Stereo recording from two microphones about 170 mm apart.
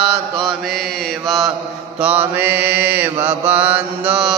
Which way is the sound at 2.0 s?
10° right (ahead or behind).